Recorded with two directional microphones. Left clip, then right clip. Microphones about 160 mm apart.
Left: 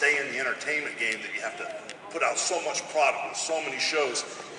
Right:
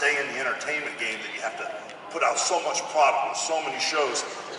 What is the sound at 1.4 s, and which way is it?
A man's voice, centre (ahead or behind).